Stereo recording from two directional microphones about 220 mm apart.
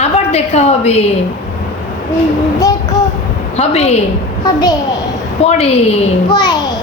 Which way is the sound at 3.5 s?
30° left (ahead or behind).